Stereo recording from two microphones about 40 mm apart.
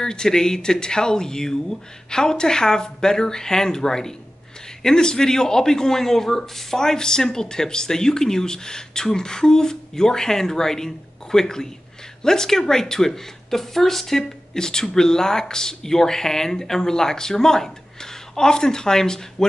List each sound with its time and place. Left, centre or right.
0.0 s speech: centre